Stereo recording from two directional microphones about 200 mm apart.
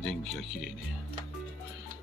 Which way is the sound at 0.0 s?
Centre (ahead or behind).